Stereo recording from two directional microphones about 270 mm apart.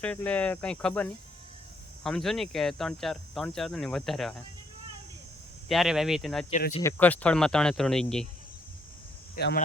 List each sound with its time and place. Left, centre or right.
0.0 s speech: centre
2.0 s speech: centre
5.6 s speech: centre
6.5 s speech: left
6.8 s speech: centre
9.3 s speech: left